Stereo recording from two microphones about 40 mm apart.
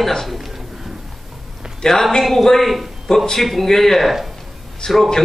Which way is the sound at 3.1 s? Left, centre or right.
Centre.